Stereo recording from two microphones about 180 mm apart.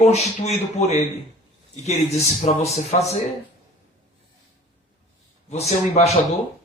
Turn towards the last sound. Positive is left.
turn(degrees=35)  # may be behind; listen again after turning